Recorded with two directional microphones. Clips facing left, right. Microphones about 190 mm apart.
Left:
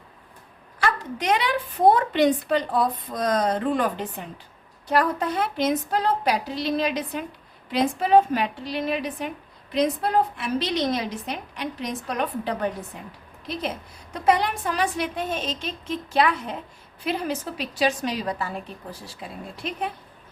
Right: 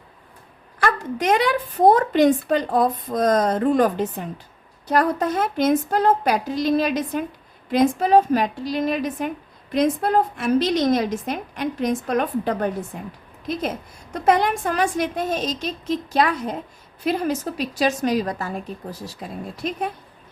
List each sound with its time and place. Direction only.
0.8 s speech: 50° right (ahead or behind)